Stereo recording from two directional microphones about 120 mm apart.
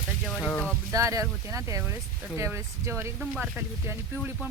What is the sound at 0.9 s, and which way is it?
Speech, 25° right (ahead or behind).